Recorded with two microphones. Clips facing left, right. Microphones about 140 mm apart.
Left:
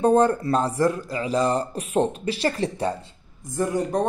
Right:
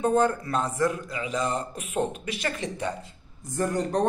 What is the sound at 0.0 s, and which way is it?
Speech, 35° left (ahead or behind).